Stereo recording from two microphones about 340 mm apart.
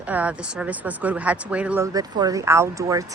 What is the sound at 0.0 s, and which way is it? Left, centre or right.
A woman's voice, centre.